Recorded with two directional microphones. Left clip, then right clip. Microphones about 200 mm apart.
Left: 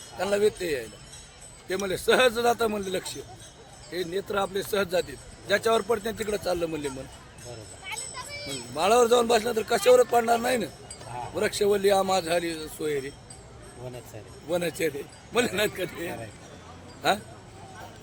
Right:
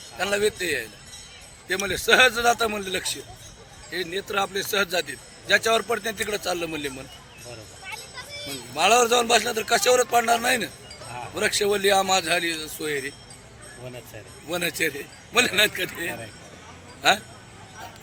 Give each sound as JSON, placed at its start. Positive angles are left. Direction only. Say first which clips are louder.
{"t": 0.2, "sound": "a man's voice", "louder": "right 1 dB", "side_deg": 15}
{"t": 8.4, "sound": "speech", "louder": "right 4 dB", "side_deg": 20}
{"t": 14.5, "sound": "speech", "louder": "right 2 dB", "side_deg": 15}